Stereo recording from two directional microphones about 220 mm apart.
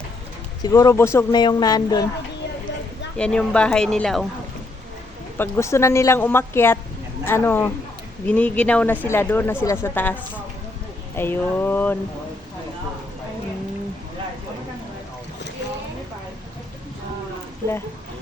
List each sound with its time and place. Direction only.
0.6 s speech: 15° left (ahead or behind)
3.2 s speech: 5° left (ahead or behind)
5.4 s speech: 10° left (ahead or behind)
11.2 s speech: 10° left (ahead or behind)